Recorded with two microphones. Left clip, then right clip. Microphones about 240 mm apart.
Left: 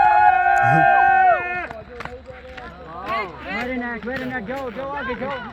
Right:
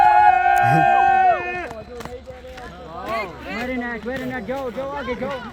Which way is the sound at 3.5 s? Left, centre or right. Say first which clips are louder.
Even; centre.